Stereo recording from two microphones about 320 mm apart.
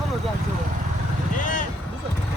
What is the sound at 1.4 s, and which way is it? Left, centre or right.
Boat, left.